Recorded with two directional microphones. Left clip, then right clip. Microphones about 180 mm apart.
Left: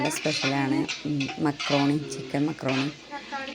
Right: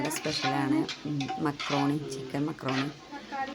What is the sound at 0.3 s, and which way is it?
Speech, 15° left (ahead or behind).